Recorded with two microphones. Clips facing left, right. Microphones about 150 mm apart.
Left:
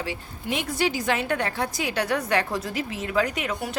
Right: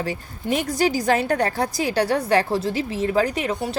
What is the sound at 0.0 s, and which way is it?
A woman's voice, 40° right (ahead or behind).